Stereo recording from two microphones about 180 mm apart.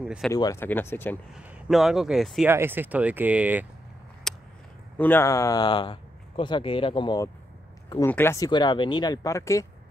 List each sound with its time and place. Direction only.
0.0 s speech: 5° right (ahead or behind)
0.3 s speech: 20° left (ahead or behind)
1.3 s speech: centre (ahead or behind)
2.4 s speech: 10° right (ahead or behind)
4.3 s a sound: centre (ahead or behind)
4.9 s speech: 10° left (ahead or behind); by 7.2 s 25° left (ahead or behind)
7.9 s speech: 15° left (ahead or behind)
8.5 s speech: 25° left (ahead or behind)